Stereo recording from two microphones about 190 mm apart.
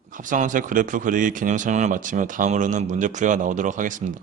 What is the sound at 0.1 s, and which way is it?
Speech, 45° right (ahead or behind).